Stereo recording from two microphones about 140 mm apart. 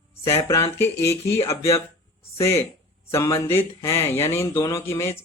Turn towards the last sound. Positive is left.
turn(degrees=20)  # may be behind; listen again after turning